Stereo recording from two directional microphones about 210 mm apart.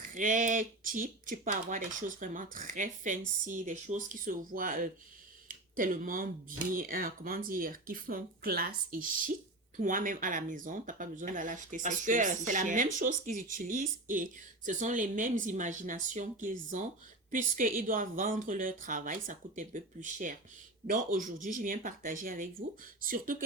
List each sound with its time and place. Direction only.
0.1 s speech: 40° right (ahead or behind)
5.5 s a sound: 40° right (ahead or behind)
6.7 s speech: 45° right (ahead or behind)